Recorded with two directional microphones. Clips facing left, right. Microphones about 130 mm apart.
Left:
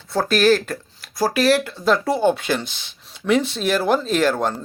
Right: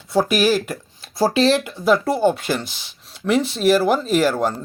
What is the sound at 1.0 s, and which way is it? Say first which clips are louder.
Speech: right 1 dB; 25° right (ahead or behind).